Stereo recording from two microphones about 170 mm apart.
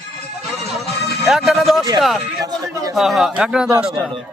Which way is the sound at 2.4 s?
20° right (ahead or behind).